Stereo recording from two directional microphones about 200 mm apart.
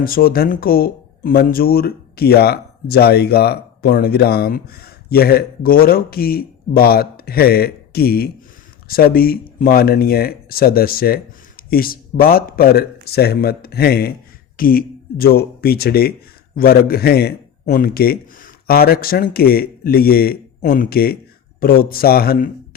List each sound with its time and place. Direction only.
0.0 s a man's voice: 45° left (ahead or behind)